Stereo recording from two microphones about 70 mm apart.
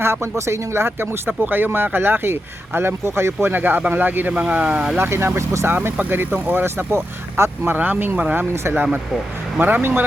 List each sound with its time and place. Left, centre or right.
0.0 s speech: right; by 4.9 s centre
4.9 s speech: right
5.7 s speech: right
7.8 s speech: right